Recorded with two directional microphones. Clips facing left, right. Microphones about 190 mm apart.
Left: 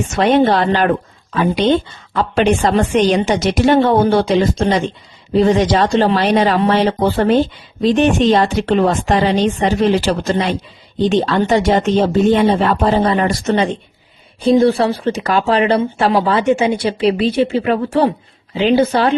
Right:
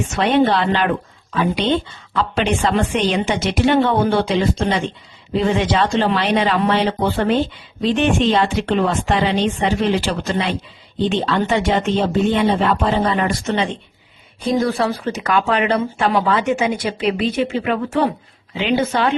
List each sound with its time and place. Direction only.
0.1 s a woman's voice: 45° left (ahead or behind)
14.4 s speech: 30° left (ahead or behind)